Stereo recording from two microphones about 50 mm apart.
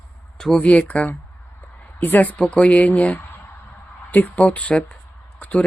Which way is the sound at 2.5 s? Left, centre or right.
Left.